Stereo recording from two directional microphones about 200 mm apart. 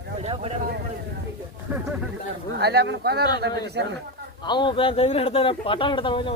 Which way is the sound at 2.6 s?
55° right (ahead or behind).